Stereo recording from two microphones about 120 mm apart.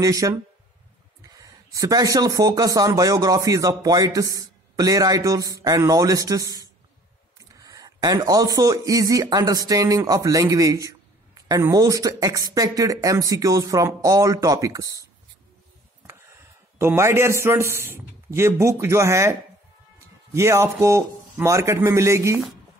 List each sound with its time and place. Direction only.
0.0 s speech: 30° right (ahead or behind)
16.1 s a man's voice: 20° right (ahead or behind)
20.3 s speech: 25° right (ahead or behind)